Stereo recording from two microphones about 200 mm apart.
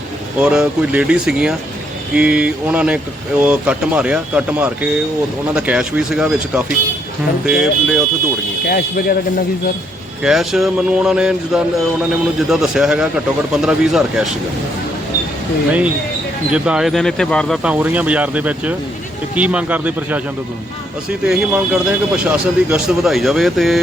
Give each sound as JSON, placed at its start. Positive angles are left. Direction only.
{"t": 0.3, "sound": "speech", "side_deg": -5}
{"t": 8.7, "sound": "speech", "side_deg": 50}
{"t": 10.2, "sound": "speech", "side_deg": 0}
{"t": 16.5, "sound": "speech", "side_deg": -5}
{"t": 21.2, "sound": "speech", "side_deg": -5}